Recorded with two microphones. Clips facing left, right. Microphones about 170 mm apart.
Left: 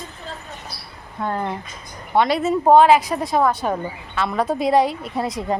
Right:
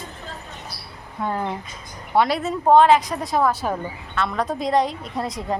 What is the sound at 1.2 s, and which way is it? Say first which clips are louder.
Speech: left 1 dB; 10° right (ahead or behind).